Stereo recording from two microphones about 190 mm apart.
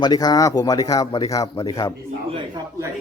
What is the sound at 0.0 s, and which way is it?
Speech, 20° left (ahead or behind).